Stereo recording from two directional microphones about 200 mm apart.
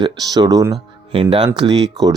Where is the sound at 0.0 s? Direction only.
20° right (ahead or behind).